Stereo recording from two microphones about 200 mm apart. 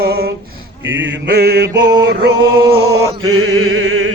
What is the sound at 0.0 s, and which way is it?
Male singing, 50° right (ahead or behind).